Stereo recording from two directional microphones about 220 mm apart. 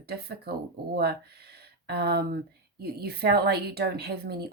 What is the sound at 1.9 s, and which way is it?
Speech, 45° right (ahead or behind).